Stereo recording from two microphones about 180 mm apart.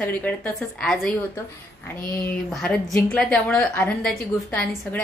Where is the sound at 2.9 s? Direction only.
5° left (ahead or behind).